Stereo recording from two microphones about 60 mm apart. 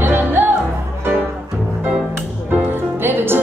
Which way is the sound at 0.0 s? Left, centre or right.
Right.